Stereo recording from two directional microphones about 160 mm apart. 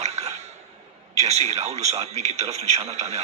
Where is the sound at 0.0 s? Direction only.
45° right (ahead or behind).